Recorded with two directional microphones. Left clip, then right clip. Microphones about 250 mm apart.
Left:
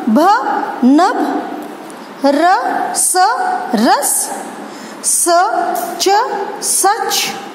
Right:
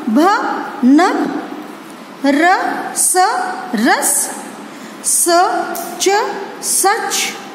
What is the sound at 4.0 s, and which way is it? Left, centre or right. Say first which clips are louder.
Speech: even; centre.